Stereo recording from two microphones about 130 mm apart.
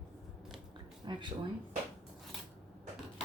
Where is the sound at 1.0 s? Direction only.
35° right (ahead or behind).